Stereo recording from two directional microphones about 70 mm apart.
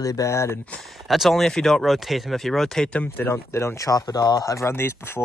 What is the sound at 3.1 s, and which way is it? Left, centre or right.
Speech, left.